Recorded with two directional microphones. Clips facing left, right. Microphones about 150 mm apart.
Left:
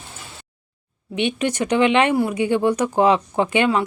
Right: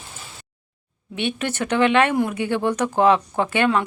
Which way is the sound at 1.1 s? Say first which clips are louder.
Left 3 dB; 15° left (ahead or behind).